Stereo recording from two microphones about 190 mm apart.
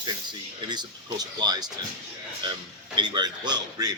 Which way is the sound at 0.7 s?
20° right (ahead or behind).